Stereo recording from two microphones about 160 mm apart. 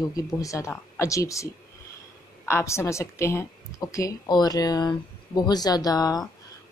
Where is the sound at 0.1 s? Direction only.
20° left (ahead or behind).